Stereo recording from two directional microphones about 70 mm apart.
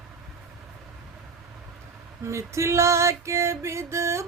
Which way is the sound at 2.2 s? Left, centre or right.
Right.